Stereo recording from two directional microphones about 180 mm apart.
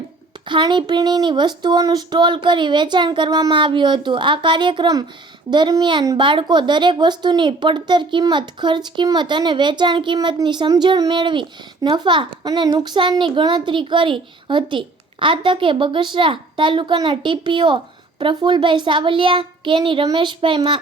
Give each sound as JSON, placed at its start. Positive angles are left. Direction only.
{"t": 0.4, "sound": "a child's voice", "side_deg": -25}